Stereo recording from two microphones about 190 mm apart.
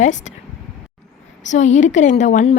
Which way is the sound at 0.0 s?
40° left (ahead or behind).